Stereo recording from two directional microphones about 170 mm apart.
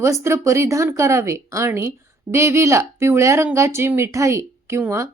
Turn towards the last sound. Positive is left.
turn(degrees=-15)  # may be behind; listen again after turning